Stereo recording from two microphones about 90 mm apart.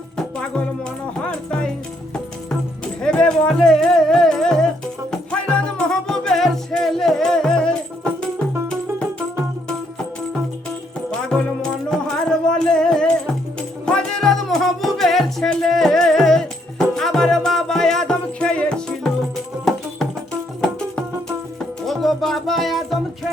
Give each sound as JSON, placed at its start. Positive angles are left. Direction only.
{"t": 0.2, "sound": "music", "side_deg": 10}
{"t": 11.1, "sound": "music", "side_deg": 10}
{"t": 20.6, "sound": "music", "side_deg": 10}